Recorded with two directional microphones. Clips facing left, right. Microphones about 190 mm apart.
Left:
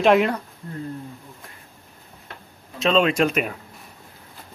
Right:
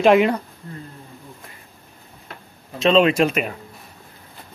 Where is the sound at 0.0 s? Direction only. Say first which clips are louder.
Right 3 dB; centre (ahead or behind).